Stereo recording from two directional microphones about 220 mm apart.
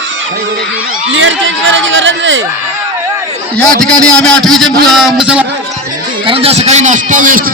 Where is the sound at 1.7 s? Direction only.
60° right (ahead or behind).